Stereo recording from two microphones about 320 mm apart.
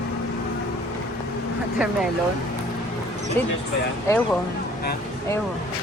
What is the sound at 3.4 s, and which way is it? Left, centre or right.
Speech, centre.